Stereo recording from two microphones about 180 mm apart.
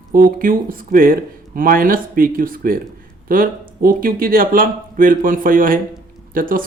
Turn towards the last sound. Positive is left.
turn(degrees=-50)  # may be behind; listen again after turning